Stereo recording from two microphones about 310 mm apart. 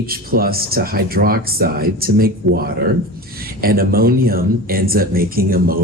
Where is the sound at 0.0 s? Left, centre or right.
Right.